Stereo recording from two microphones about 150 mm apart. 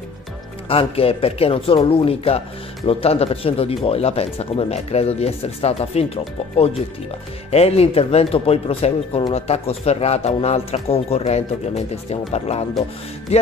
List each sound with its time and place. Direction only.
0.7 s speech: 40° left (ahead or behind)